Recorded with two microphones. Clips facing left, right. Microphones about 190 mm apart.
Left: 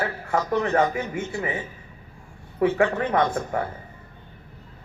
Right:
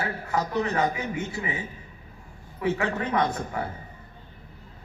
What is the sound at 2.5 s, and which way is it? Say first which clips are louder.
A man's voice: left 6 dB; 45° left (ahead or behind).